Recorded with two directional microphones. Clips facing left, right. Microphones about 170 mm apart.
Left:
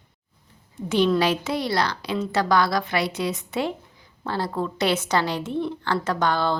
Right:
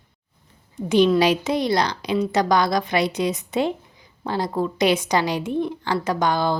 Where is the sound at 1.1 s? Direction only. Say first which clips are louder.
Right 3 dB; 15° right (ahead or behind).